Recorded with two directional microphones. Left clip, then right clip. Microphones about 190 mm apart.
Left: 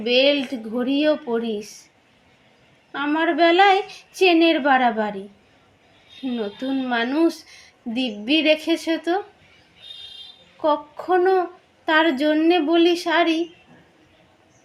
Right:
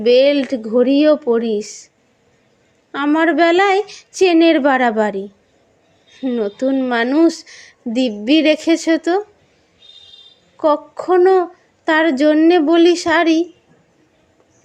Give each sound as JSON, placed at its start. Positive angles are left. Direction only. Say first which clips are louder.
{"t": 0.0, "sound": "a woman's voice", "louder": "right 6 dB", "side_deg": -65}
{"t": 2.9, "sound": "a woman's voice", "louder": "right 6 dB", "side_deg": -65}
{"t": 6.2, "sound": "a woman's voice", "louder": "right 9 dB", "side_deg": -60}
{"t": 10.6, "sound": "a woman's voice", "louder": "right 6 dB", "side_deg": -65}